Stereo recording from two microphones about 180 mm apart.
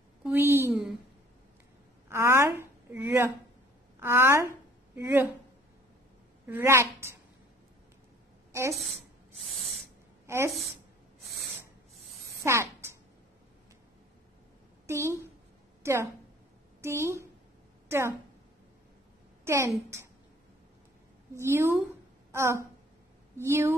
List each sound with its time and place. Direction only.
0.2 s a sound: 10° right (ahead or behind)
2.0 s a woman's voice: 15° right (ahead or behind)
6.4 s a woman's voice: 15° right (ahead or behind)
10.2 s a woman's voice: 15° right (ahead or behind)
12.4 s a sound: 15° right (ahead or behind)
14.9 s a woman's voice: 15° right (ahead or behind)
19.4 s a woman's voice: 15° right (ahead or behind)
21.4 s a woman's voice: 15° right (ahead or behind)